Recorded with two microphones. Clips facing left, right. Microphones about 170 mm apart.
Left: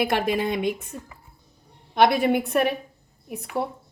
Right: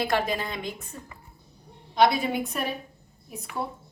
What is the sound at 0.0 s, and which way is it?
Speech, 70° left (ahead or behind).